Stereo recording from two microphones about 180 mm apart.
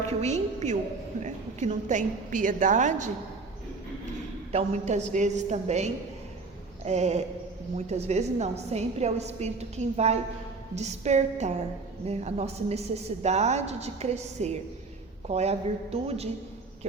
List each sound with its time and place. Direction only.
0.2 s a woman's voice: 40° right (ahead or behind)
4.5 s a woman's voice: 40° right (ahead or behind)